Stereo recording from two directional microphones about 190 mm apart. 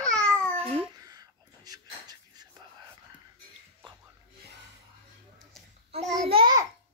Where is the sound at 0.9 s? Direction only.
20° right (ahead or behind).